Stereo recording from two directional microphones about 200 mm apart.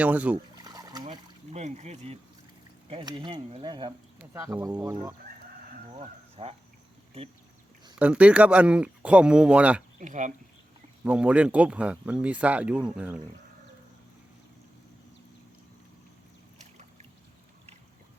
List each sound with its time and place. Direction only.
0.0 s speech: 5° right (ahead or behind)
0.5 s trickle: 20° right (ahead or behind)
1.0 s speech: 30° right (ahead or behind)
2.9 s speech: 20° right (ahead or behind)
4.2 s speech: 10° right (ahead or behind)
6.0 s speech: 30° right (ahead or behind)
7.9 s speech: 5° right (ahead or behind)
10.0 s speech: 40° right (ahead or behind)
11.0 s speech: 5° right (ahead or behind)